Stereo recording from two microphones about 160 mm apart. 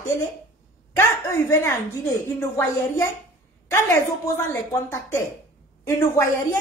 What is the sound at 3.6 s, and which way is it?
A woman's voice, 15° left (ahead or behind).